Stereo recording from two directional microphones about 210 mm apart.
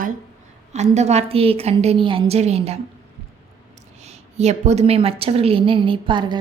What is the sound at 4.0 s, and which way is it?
A woman's voice, 30° right (ahead or behind).